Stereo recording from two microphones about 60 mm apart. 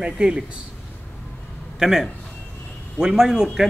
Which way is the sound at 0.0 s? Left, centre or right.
Centre.